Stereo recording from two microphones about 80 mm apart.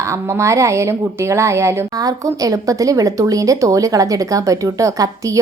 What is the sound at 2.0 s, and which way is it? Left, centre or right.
A woman's voice, right.